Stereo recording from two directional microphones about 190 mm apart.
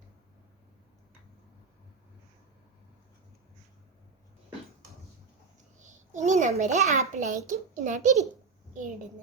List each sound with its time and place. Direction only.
5.8 s a child's voice: 40° right (ahead or behind)